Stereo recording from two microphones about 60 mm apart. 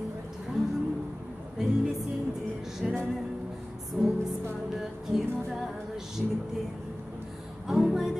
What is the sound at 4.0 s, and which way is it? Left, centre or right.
Music, right.